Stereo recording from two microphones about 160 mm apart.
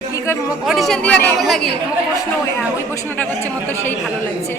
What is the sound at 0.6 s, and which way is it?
Speech, centre (ahead or behind).